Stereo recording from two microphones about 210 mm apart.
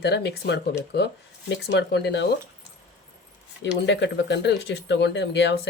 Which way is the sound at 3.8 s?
55° left (ahead or behind).